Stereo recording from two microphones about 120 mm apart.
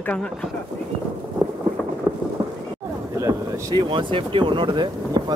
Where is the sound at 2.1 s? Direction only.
25° right (ahead or behind).